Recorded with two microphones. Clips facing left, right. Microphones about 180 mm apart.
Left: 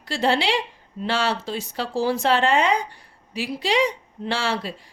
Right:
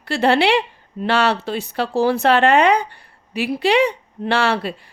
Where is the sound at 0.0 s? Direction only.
65° right (ahead or behind).